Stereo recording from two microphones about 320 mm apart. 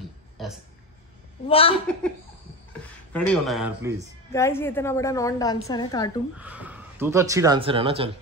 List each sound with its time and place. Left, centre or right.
1.5 s a woman's voice: centre
3.1 s speech: centre
4.3 s a woman's voice: centre
6.3 s speech: centre